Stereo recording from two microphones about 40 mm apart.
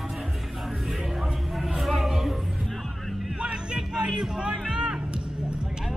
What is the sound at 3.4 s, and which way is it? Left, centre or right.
Music, right.